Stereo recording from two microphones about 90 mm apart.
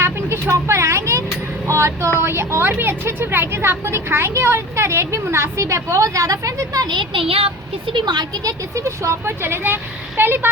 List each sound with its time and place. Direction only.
0.0 s vehicle: 30° right (ahead or behind)
1.6 s a sound: 35° right (ahead or behind)
2.1 s a woman's voice: 30° right (ahead or behind)
6.9 s speech: 65° right (ahead or behind); by 7.5 s 90° right
7.9 s speech: 55° right (ahead or behind)
8.7 s a woman's voice: 35° right (ahead or behind)